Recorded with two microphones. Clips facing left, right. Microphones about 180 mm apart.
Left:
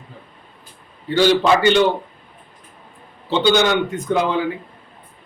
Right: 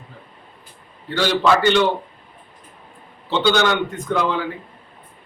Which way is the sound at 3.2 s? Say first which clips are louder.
Left 2 dB; 15° left (ahead or behind).